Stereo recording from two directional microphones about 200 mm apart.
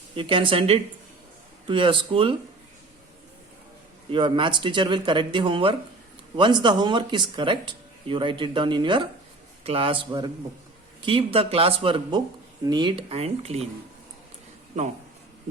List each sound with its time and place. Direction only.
0.2 s speech: 25° right (ahead or behind)
4.1 s speech: 25° right (ahead or behind)
14.8 s speech: 35° right (ahead or behind)